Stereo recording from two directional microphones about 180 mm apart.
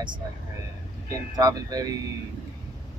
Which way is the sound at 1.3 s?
20° right (ahead or behind).